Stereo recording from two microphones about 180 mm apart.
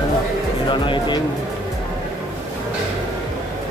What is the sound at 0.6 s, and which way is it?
Speech, 25° left (ahead or behind).